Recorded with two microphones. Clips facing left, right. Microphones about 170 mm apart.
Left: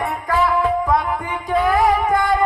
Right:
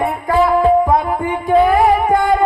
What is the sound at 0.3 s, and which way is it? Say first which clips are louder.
Music: right 6 dB; 30° right (ahead or behind).